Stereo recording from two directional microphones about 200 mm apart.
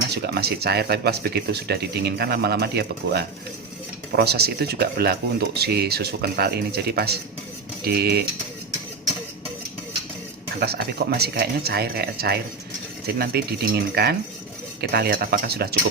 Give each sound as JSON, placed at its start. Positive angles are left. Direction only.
{"t": 0.1, "sound": "speech", "side_deg": -55}
{"t": 10.6, "sound": "speech", "side_deg": -55}